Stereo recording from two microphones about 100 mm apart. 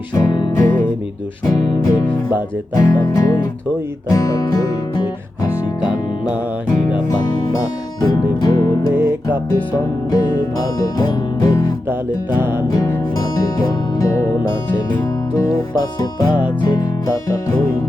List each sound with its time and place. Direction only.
0.1 s music: 40° left (ahead or behind)
1.5 s speech: 40° left (ahead or behind)
2.7 s music: 45° left (ahead or behind)
8.0 s music: 40° left (ahead or behind)
8.9 s music: 20° right (ahead or behind)
10.1 s music: 45° left (ahead or behind)
11.9 s music: 20° right (ahead or behind)
12.6 s speech: 40° left (ahead or behind)
13.6 s music: 40° left (ahead or behind)
16.0 s music: 45° left (ahead or behind)